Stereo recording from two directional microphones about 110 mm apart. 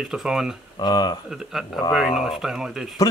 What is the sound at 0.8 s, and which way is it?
Speech, 40° left (ahead or behind).